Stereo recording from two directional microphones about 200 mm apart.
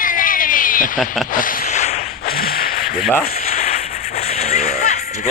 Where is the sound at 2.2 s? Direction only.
50° left (ahead or behind).